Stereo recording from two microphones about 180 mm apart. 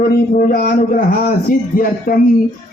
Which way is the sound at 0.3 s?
55° left (ahead or behind).